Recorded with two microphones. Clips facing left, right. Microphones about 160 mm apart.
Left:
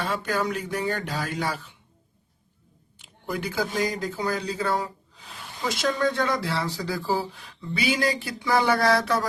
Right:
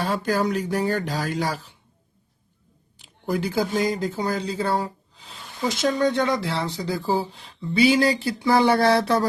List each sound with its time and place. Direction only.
0.0 s speech: 35° right (ahead or behind)
3.2 s speech: 35° right (ahead or behind)